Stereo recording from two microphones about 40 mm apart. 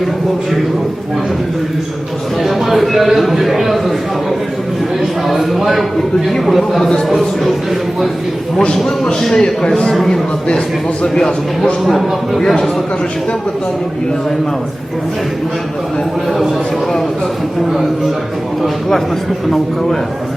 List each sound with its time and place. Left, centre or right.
2.4 s a man's voice: centre
5.3 s a man's voice: centre
9.4 s a man's voice: left
11.0 s speech: centre
11.9 s a man's voice: centre
12.5 s speech: centre